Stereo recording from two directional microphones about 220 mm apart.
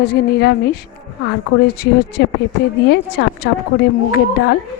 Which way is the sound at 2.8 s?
50° left (ahead or behind).